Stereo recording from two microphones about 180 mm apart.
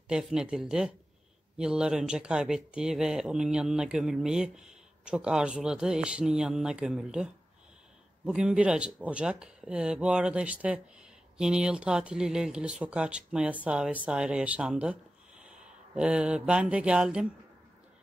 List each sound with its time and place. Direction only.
0.1 s speech: 5° right (ahead or behind)
8.3 s speech: 5° right (ahead or behind)
15.4 s a sound: 5° right (ahead or behind)